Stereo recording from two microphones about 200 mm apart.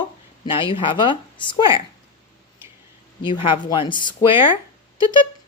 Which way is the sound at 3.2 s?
25° left (ahead or behind).